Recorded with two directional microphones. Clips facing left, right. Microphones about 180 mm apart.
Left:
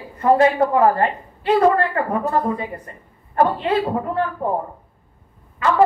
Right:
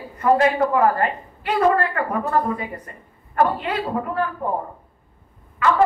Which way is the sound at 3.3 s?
30° left (ahead or behind).